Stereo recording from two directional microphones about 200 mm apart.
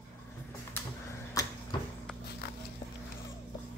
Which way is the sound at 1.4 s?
15° left (ahead or behind).